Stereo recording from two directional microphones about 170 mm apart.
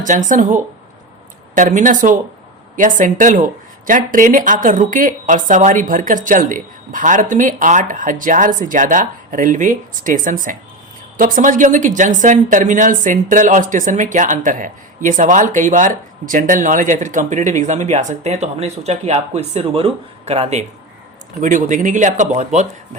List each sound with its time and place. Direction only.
0.0 s speech: 45° right (ahead or behind)
21.4 s speech: 50° right (ahead or behind)